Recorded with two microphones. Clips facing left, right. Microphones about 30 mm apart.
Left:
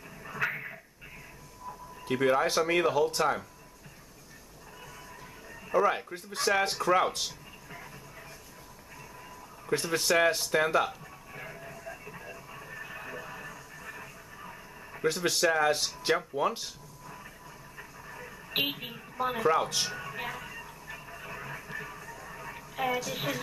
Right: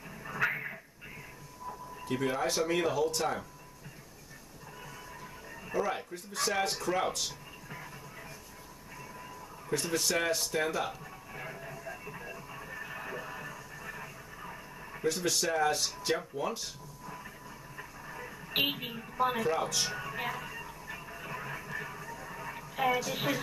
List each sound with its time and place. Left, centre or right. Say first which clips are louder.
0.2 s a sound: right 1 dB; centre
2.0 s speech: left 6 dB; left
5.7 s speech: left 6 dB; left
7.2 s music: even; centre
9.9 s speech: left 6 dB; left
10.9 s music: even; centre
15.2 s speech: left 4 dB; left
17.0 s a sound: right 2 dB; centre
17.7 s radio: right 1 dB; centre
19.5 s speech: left 4 dB; centre
19.9 s television: right 1 dB; centre